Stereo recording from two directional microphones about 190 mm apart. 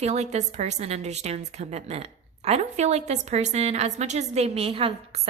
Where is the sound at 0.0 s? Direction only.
35° right (ahead or behind).